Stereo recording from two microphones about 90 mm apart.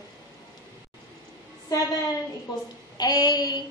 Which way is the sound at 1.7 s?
40° left (ahead or behind).